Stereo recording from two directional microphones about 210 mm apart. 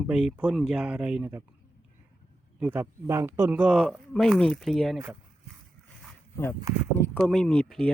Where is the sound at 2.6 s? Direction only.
10° right (ahead or behind).